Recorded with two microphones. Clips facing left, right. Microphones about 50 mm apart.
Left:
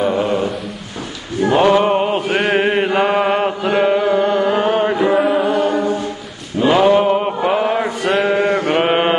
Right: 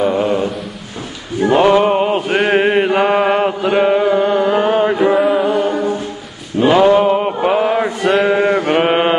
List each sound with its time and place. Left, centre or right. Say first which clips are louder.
0.1 s a sound: right 2 dB; centre
1.4 s a sound: right 2 dB; right
1.9 s chant: right 2 dB; centre
3.0 s mantra: right 2 dB; centre
4.9 s music: right 2 dB; centre
5.2 s music: right 1 dB; centre
6.7 s mantra: right 2 dB; centre